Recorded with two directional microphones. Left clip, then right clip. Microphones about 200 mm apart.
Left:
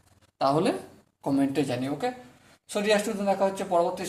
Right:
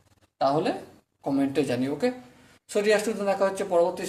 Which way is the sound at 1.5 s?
Centre (ahead or behind).